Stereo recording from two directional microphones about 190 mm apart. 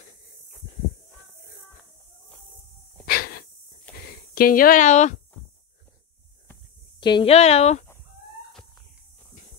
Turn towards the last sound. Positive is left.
turn(degrees=35)  # may be behind; listen again after turning